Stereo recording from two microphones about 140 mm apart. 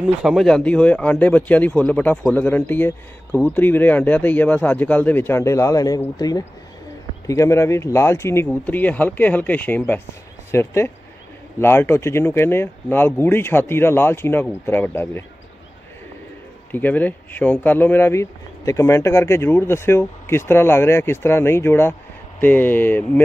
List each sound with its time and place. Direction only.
0.2 s speech: centre (ahead or behind); by 15.2 s 15° left (ahead or behind)
16.7 s speech: 10° left (ahead or behind)